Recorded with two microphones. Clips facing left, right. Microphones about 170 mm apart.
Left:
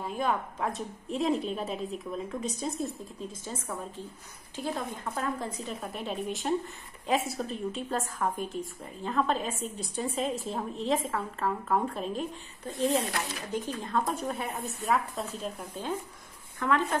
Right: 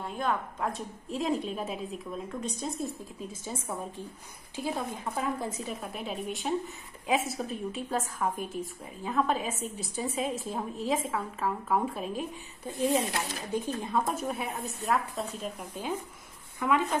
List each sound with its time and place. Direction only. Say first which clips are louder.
0.0 s a woman's voice: left 1 dB; 5° left (ahead or behind)
3.4 s a woman's voice: right 3 dB; 10° right (ahead or behind)
12.9 s a woman's voice: right 1 dB; 15° right (ahead or behind)